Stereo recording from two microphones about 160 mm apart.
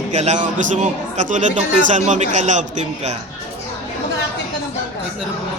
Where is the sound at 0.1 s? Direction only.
45° right (ahead or behind).